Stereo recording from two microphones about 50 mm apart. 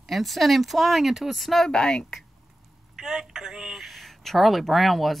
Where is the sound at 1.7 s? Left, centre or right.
Centre.